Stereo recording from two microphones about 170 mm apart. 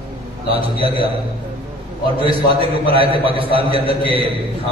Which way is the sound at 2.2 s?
30° right (ahead or behind).